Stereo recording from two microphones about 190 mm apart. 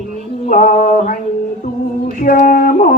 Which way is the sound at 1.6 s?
40° left (ahead or behind).